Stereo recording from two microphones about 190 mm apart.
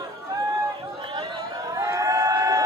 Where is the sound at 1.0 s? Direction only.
20° right (ahead or behind).